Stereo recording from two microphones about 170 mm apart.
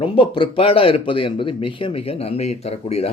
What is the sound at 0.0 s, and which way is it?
Speech, 30° left (ahead or behind).